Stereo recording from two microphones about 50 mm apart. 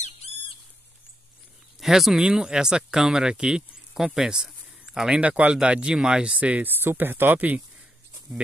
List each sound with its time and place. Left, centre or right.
1.8 s speech: centre
4.5 s a sound: centre
5.1 s speech: right
6.7 s speech: right
7.3 s speech: right